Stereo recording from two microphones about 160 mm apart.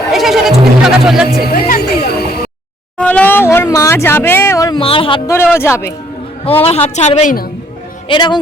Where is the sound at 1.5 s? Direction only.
70° left (ahead or behind).